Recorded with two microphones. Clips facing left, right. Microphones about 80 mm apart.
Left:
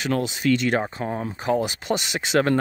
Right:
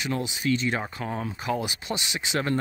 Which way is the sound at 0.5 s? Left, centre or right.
Left.